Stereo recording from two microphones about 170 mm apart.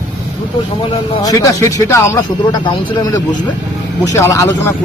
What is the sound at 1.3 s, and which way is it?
A man's voice, 20° left (ahead or behind).